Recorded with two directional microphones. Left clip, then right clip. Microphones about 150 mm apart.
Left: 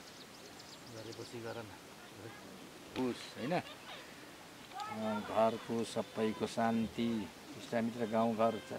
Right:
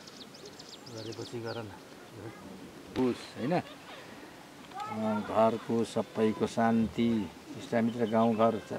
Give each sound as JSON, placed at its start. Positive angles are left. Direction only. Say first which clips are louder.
{"t": 2.9, "sound": "speech", "louder": "right 7 dB", "side_deg": 5}
{"t": 4.7, "sound": "speech", "louder": "right 5 dB", "side_deg": 5}